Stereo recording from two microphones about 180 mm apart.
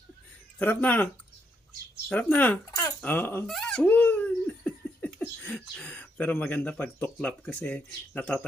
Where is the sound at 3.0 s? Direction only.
10° left (ahead or behind).